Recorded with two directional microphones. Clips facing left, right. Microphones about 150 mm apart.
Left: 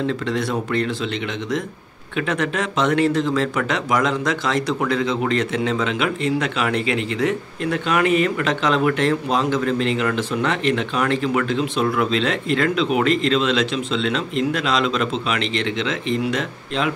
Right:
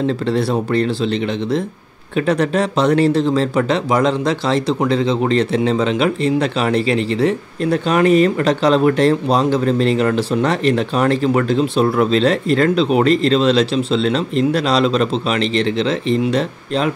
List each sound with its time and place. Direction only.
0.0 s speech: 35° right (ahead or behind)
2.1 s speech: 35° right (ahead or behind)